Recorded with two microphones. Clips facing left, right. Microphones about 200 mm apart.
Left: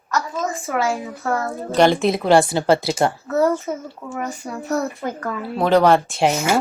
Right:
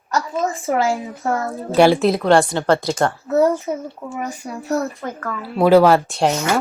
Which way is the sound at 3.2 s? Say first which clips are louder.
Right 2 dB; 15° right (ahead or behind).